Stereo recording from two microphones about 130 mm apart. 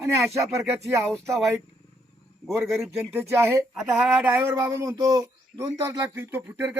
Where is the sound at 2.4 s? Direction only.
5° left (ahead or behind).